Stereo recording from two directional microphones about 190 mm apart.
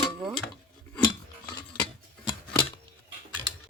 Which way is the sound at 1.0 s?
20° left (ahead or behind).